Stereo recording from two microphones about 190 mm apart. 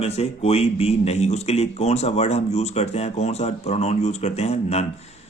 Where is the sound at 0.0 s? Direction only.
30° left (ahead or behind).